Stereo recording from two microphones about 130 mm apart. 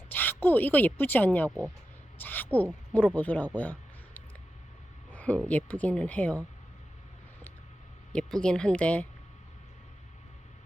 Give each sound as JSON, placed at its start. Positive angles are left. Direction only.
{"t": 0.1, "sound": "speech", "side_deg": 15}
{"t": 2.1, "sound": "a sound", "side_deg": 15}
{"t": 2.9, "sound": "speech", "side_deg": 10}
{"t": 5.1, "sound": "a sound", "side_deg": 10}
{"t": 5.5, "sound": "speech", "side_deg": 10}
{"t": 8.1, "sound": "speech", "side_deg": 5}